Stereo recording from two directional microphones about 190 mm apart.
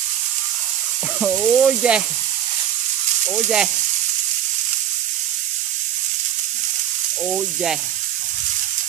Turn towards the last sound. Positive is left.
turn(degrees=-5)  # may be behind; listen again after turning